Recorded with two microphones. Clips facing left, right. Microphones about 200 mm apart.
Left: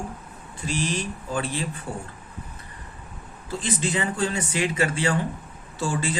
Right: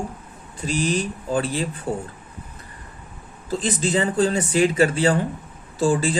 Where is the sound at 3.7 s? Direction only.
35° right (ahead or behind).